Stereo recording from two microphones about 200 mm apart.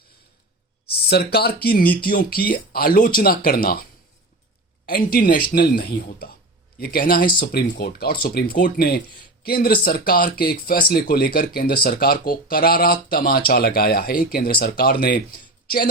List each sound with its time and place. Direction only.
0.9 s speech: 55° left (ahead or behind)
4.9 s speech: 45° left (ahead or behind)